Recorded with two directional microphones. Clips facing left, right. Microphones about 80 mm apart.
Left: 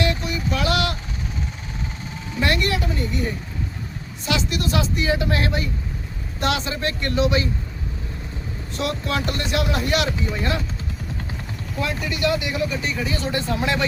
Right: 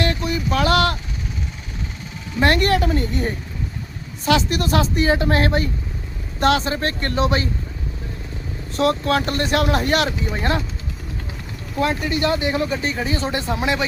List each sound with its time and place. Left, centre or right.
0.0 s a sound: right
2.4 s speech: right
8.7 s speech: right
11.8 s speech: right; by 13.8 s centre